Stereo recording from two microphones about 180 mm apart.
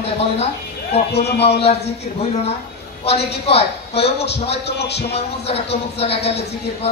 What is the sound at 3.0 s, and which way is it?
Speech, 35° left (ahead or behind).